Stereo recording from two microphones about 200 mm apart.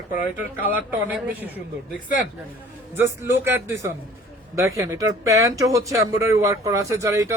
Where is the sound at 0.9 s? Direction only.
10° right (ahead or behind).